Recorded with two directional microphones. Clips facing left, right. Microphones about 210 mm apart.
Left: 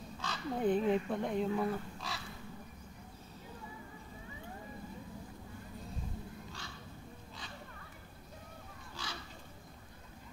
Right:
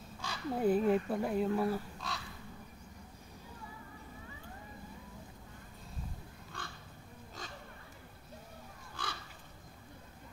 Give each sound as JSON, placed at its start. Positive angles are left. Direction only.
{"t": 0.2, "sound": "speech", "side_deg": -10}
{"t": 6.6, "sound": "a sound", "side_deg": -55}
{"t": 9.0, "sound": "crow", "side_deg": -55}